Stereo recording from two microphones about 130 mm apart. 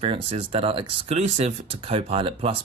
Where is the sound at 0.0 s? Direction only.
45° right (ahead or behind).